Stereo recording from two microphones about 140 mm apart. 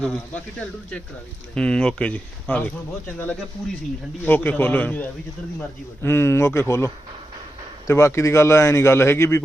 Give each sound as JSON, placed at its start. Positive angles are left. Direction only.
{"t": 0.0, "sound": "speech", "side_deg": 5}